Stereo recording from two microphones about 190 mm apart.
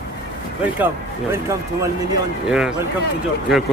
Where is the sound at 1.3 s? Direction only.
15° right (ahead or behind).